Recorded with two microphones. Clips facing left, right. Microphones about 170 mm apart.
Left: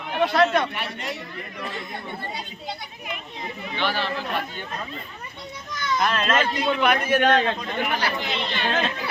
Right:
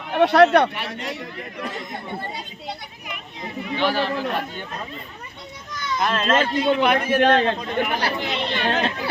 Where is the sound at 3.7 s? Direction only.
40° right (ahead or behind).